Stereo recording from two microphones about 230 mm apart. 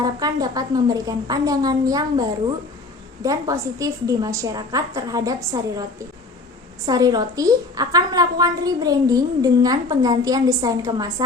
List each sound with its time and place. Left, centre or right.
0.0 s a woman's voice: centre
3.2 s a woman's voice: centre
6.8 s a woman's voice: centre